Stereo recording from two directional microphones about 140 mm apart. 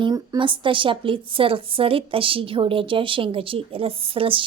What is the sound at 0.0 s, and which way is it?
A woman's voice, 30° right (ahead or behind).